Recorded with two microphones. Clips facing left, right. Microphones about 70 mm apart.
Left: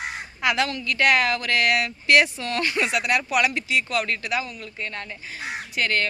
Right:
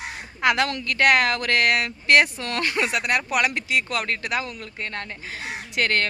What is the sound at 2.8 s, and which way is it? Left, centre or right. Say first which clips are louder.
A woman's voice: even; right.